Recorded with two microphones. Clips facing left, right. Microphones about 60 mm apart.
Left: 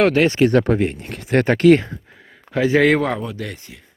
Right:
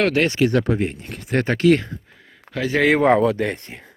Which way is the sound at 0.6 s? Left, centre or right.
Left.